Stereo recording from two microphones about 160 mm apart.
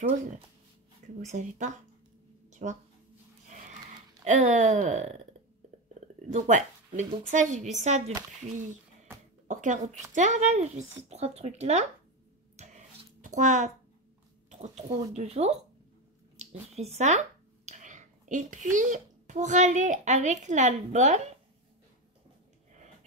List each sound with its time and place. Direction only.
1.2 s speech: 50° right (ahead or behind)
3.4 s a sound: 50° right (ahead or behind)
4.2 s speech: 50° right (ahead or behind)
6.3 s speech: 50° right (ahead or behind)
9.1 s a sound: 15° right (ahead or behind)
9.5 s a sound: 50° right (ahead or behind)
10.1 s speech: 50° right (ahead or behind)
13.2 s a child's voice: 50° right (ahead or behind)
15.1 s speech: 40° right (ahead or behind)
16.6 s a child's voice: 40° right (ahead or behind)